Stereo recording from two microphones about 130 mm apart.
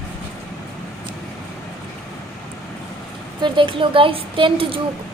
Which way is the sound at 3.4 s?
40° right (ahead or behind).